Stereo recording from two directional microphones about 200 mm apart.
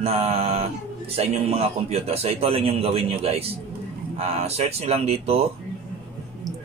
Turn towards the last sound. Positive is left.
turn(degrees=-30)  # may be behind; listen again after turning